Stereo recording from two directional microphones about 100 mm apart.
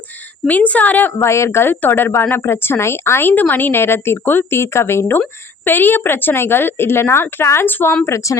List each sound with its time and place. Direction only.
0.4 s speech: 15° left (ahead or behind)